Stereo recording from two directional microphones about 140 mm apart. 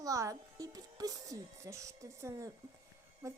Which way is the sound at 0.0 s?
25° right (ahead or behind).